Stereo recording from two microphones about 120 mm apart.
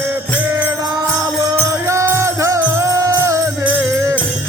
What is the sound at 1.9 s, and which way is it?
Music, 25° right (ahead or behind).